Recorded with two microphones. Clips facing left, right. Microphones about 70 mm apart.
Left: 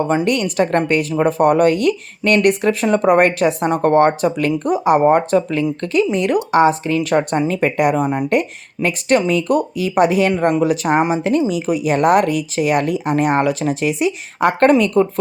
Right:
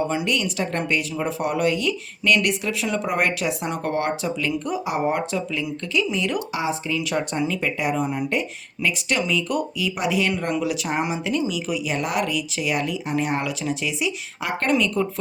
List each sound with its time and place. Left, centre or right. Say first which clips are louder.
0.1 s speech: left 7 dB; left